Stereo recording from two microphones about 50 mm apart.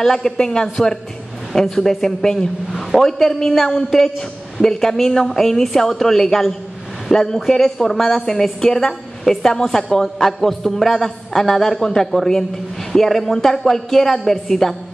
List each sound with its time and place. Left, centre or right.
0.0 s a woman's voice: centre